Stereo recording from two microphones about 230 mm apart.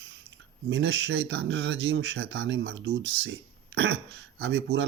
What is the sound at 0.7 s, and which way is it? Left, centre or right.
Speech, right.